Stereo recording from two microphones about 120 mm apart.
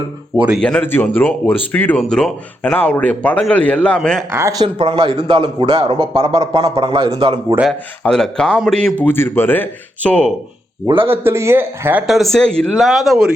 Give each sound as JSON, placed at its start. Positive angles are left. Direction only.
{"t": 0.6, "sound": "speech", "side_deg": 5}
{"t": 0.9, "sound": "speech", "side_deg": 15}
{"t": 2.0, "sound": "speech", "side_deg": 5}
{"t": 4.3, "sound": "speech", "side_deg": -20}
{"t": 4.6, "sound": "a man's voice", "side_deg": -45}
{"t": 8.0, "sound": "speech", "side_deg": 5}
{"t": 9.0, "sound": "speech", "side_deg": 20}
{"t": 11.0, "sound": "speech", "side_deg": -20}
{"t": 12.0, "sound": "speech", "side_deg": 0}